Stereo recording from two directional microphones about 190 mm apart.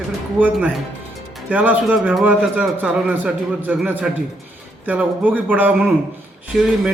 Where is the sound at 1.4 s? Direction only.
10° right (ahead or behind).